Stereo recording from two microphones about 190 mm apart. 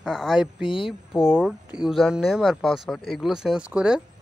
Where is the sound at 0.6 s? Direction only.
25° left (ahead or behind).